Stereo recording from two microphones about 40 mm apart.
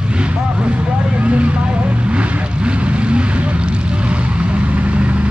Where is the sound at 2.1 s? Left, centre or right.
Right.